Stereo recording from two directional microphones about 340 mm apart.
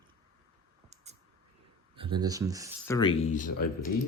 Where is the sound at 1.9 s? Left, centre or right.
Centre.